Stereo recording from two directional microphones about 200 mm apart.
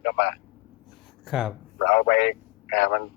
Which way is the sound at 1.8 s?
60° left (ahead or behind).